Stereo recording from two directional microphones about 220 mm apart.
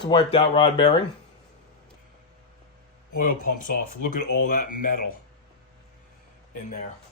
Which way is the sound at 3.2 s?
40° left (ahead or behind).